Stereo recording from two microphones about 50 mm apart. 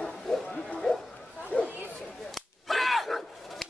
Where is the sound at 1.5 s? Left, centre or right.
Left.